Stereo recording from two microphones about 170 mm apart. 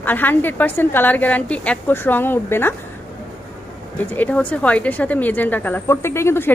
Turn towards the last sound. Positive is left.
turn(degrees=15)  # may be behind; listen again after turning